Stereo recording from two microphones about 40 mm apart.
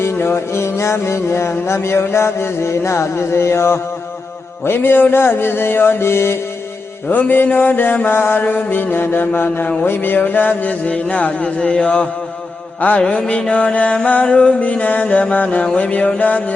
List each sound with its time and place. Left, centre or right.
0.0 s music: left
7.1 s a sound: left
8.0 s mantra: left
9.8 s a sound: left
11.1 s mantra: left
13.0 s music: left
13.5 s mantra: left